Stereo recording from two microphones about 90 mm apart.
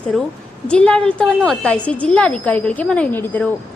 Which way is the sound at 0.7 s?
10° left (ahead or behind).